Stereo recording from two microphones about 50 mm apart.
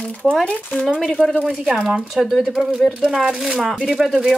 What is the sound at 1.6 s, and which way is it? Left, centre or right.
Speech, centre.